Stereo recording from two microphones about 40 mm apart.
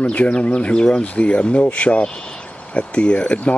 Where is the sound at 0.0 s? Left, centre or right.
Left.